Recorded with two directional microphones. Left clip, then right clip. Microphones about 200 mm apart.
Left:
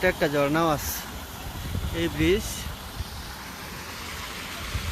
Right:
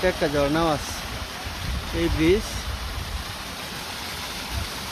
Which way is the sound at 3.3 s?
25° right (ahead or behind).